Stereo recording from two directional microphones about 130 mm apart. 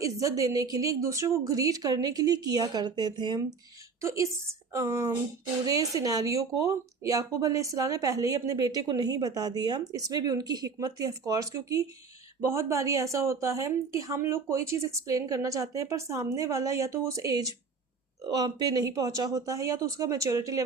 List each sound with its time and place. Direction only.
0.0 s speech: 25° right (ahead or behind)
4.0 s speech: 25° right (ahead or behind)